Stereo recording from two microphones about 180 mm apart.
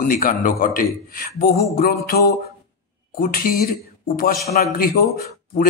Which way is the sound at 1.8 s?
55° left (ahead or behind).